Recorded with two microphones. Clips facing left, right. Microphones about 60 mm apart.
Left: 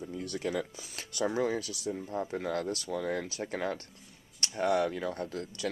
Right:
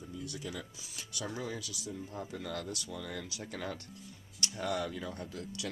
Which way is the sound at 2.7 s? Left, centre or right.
Left.